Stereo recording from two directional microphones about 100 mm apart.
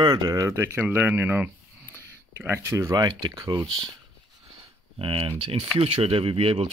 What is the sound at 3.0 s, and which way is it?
Speech, 45° right (ahead or behind).